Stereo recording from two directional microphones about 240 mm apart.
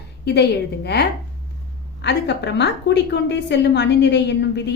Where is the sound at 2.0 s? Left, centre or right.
Left.